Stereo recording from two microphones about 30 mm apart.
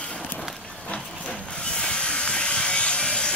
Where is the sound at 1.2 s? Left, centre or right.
Left.